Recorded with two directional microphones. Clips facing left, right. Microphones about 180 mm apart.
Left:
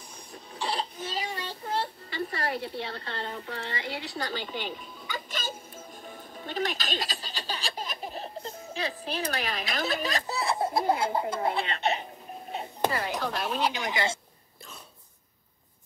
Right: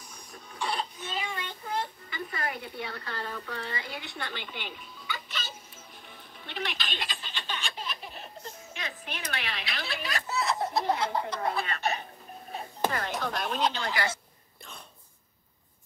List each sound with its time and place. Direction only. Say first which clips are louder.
0.3 s child singing: left 1 dB; 30° left (ahead or behind); by 5.6 s 45° left (ahead or behind)
6.0 s music: left 7 dB; 40° left (ahead or behind); by 12.9 s 20° left (ahead or behind)
12.9 s speech: left 2 dB; 5° left (ahead or behind)